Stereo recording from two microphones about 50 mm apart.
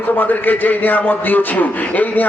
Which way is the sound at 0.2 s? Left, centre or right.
Left.